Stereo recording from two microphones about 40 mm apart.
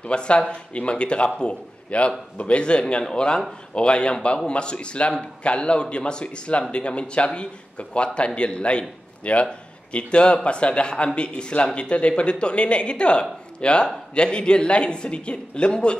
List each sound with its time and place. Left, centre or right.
0.0 s a man's voice: left